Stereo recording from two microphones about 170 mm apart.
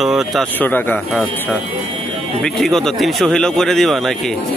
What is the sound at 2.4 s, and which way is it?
Speech, 5° left (ahead or behind).